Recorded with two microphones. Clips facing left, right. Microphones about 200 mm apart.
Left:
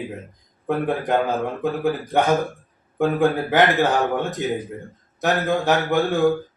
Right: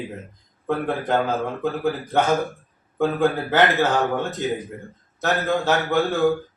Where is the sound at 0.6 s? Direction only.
15° left (ahead or behind).